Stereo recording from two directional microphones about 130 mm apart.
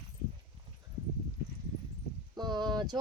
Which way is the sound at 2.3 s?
35° right (ahead or behind).